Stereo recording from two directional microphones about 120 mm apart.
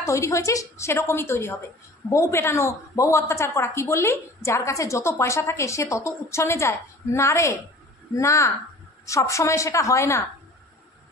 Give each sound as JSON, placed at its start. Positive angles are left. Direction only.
{"t": 0.0, "sound": "a woman's voice", "side_deg": 25}